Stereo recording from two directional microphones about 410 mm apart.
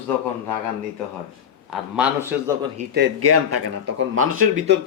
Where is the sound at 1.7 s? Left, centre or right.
Centre.